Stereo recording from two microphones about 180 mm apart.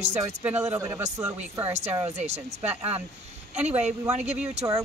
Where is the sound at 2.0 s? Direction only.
35° right (ahead or behind).